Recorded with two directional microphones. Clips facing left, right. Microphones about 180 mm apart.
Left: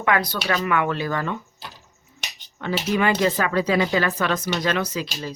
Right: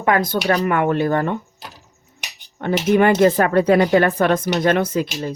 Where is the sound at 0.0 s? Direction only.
45° right (ahead or behind).